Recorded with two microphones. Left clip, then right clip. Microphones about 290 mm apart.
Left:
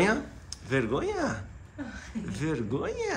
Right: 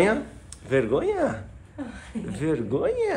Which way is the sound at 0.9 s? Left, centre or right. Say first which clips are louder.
Right 6 dB; centre.